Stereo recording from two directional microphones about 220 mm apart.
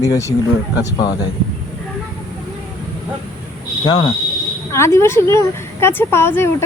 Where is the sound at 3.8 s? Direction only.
20° left (ahead or behind).